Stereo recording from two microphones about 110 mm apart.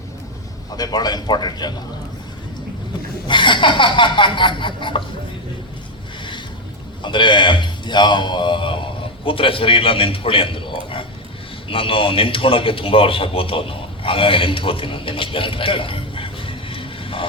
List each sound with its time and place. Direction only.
0.8 s speech: 40° left (ahead or behind)
3.2 s a man's voice: 45° left (ahead or behind)
7.0 s a man's voice: 45° left (ahead or behind)